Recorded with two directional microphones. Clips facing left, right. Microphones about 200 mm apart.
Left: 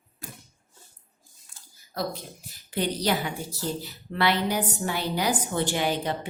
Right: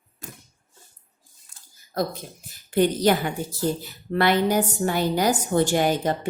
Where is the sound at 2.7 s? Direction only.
50° right (ahead or behind).